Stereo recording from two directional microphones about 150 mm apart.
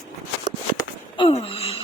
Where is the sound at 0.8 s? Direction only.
30° left (ahead or behind).